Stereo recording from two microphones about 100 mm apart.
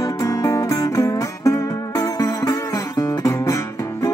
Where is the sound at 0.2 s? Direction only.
35° left (ahead or behind).